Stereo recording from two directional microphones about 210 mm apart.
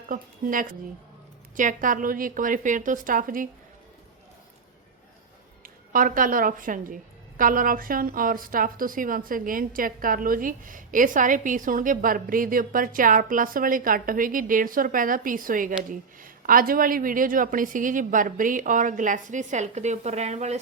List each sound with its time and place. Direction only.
0.1 s a woman's voice: 40° right (ahead or behind)
5.6 s a woman's voice: 40° right (ahead or behind)